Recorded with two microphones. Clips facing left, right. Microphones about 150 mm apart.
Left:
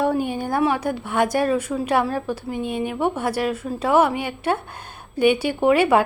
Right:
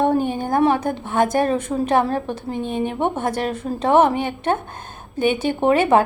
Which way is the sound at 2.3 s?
10° left (ahead or behind).